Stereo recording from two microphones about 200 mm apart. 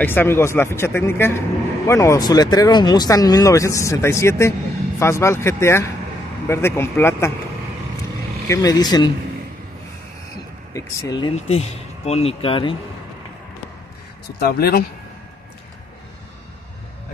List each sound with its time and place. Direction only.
0.0 s speech: 10° left (ahead or behind)
8.5 s speech: 20° left (ahead or behind)
10.7 s speech: 15° left (ahead or behind)
11.4 s speech: 30° left (ahead or behind)
14.4 s speech: 50° left (ahead or behind)